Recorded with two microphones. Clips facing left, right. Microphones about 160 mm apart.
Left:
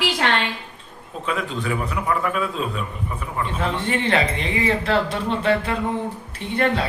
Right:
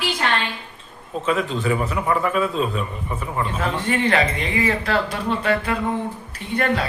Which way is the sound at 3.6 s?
25° left (ahead or behind).